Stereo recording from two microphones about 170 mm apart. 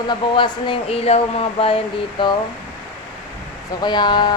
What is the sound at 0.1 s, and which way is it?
Speech, 30° left (ahead or behind).